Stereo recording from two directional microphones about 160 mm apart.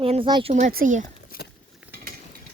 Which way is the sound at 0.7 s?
55° right (ahead or behind).